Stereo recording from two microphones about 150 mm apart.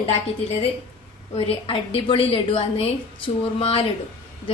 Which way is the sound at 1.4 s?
35° left (ahead or behind).